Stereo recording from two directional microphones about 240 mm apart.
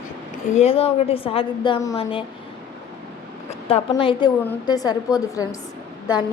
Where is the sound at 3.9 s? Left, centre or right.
Centre.